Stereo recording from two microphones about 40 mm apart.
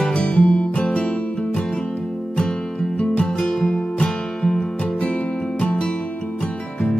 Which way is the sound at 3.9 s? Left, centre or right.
Left.